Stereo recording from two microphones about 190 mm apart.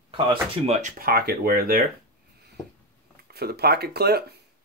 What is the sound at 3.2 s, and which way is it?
Speech, 55° right (ahead or behind).